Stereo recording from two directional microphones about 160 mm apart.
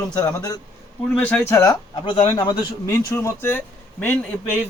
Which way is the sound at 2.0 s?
35° left (ahead or behind).